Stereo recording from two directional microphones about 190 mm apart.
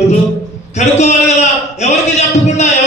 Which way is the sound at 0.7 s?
35° left (ahead or behind).